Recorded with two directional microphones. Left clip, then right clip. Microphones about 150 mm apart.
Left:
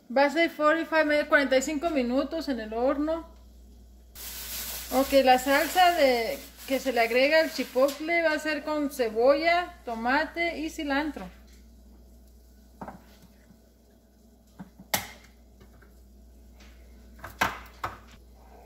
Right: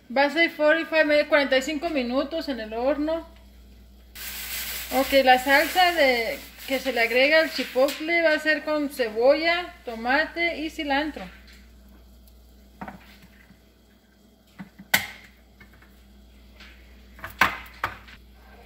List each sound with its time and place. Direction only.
0.1 s speech: centre (ahead or behind)
5.1 s speech: centre (ahead or behind)